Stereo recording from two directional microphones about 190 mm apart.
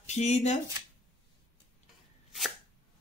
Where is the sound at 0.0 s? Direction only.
35° left (ahead or behind).